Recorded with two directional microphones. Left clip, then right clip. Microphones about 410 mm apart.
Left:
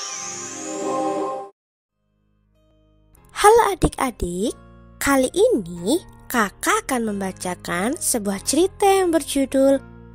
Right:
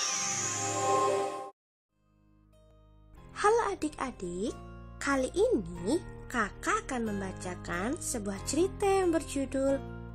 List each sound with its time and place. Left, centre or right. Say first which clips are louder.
0.0 s music: left 1 dB; centre
3.3 s speech: left 13 dB; centre